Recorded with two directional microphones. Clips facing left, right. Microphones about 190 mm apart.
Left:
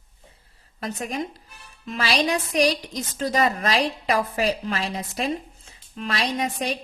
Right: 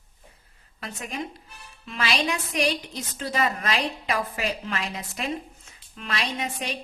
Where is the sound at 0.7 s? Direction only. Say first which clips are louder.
Left 5 dB; 40° left (ahead or behind).